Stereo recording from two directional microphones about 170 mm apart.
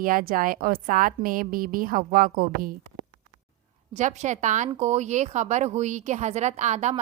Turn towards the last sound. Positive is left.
turn(degrees=-40)  # may be behind; listen again after turning